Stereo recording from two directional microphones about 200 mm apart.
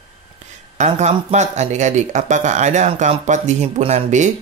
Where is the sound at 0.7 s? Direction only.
35° right (ahead or behind).